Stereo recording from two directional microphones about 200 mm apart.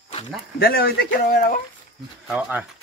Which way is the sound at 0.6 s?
50° left (ahead or behind).